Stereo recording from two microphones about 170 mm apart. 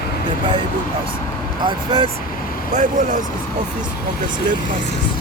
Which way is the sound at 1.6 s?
30° right (ahead or behind).